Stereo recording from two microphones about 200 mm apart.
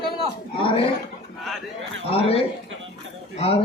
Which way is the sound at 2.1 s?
30° left (ahead or behind).